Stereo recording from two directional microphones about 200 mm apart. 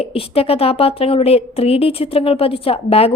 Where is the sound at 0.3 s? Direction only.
30° left (ahead or behind).